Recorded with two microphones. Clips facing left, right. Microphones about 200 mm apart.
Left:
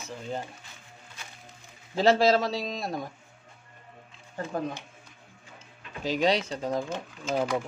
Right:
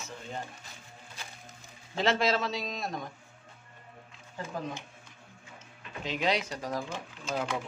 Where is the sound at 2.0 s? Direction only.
35° left (ahead or behind).